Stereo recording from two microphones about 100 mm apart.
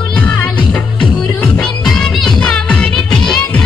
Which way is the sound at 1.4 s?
10° left (ahead or behind).